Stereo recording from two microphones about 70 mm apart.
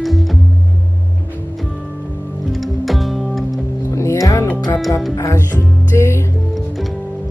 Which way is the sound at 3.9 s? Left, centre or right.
Left.